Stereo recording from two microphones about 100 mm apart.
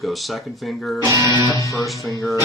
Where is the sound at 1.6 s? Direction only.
30° left (ahead or behind).